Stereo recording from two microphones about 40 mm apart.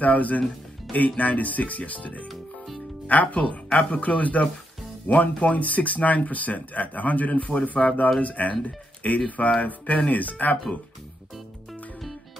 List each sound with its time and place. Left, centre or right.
0.0 s speech: left